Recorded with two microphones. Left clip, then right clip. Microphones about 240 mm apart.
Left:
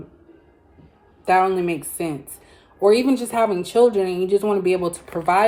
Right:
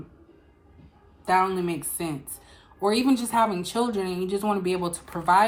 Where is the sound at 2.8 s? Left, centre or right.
Centre.